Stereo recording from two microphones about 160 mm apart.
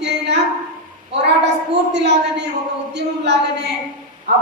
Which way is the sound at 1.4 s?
90° right.